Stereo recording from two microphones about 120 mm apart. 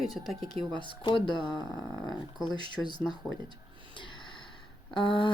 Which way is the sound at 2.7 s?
35° left (ahead or behind).